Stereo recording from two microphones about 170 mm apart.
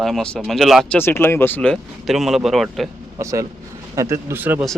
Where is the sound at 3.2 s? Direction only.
20° right (ahead or behind).